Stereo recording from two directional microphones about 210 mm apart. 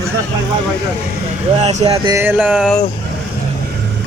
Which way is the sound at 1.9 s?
20° right (ahead or behind).